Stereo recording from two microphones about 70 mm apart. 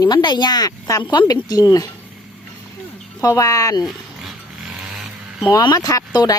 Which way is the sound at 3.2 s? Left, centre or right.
Left.